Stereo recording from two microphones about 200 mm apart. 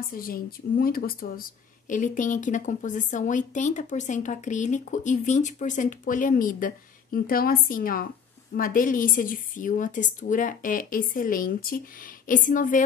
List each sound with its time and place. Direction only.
0.1 s a woman's voice: 45° left (ahead or behind)